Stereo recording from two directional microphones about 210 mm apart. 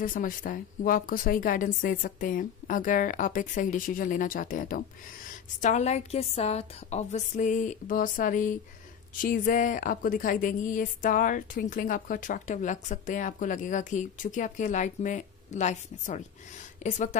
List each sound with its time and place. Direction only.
0.0 s a woman's voice: 40° left (ahead or behind)